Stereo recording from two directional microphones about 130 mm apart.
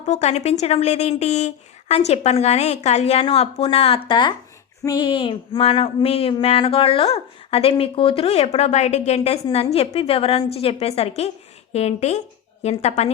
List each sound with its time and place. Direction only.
0.0 s a woman's voice: 60° left (ahead or behind); by 4.4 s 40° left (ahead or behind)
4.9 s a sound: 40° left (ahead or behind)
11.7 s a woman's voice: 55° left (ahead or behind)